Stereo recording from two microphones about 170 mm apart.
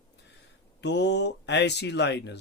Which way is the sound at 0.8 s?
90° left.